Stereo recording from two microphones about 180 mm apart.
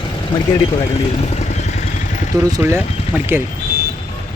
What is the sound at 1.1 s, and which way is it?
Vehicle, 35° left (ahead or behind).